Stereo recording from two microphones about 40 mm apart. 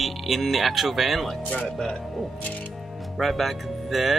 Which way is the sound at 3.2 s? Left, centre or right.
Centre.